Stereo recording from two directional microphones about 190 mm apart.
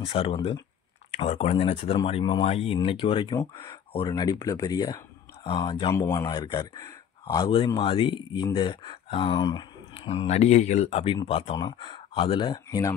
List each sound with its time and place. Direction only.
0.0 s speech: 30° left (ahead or behind)